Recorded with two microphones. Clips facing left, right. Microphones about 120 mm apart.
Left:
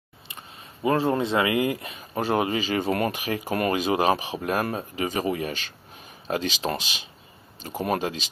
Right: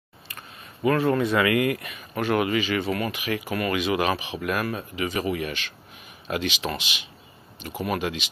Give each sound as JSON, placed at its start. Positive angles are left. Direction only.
{"t": 0.8, "sound": "speech", "side_deg": 25}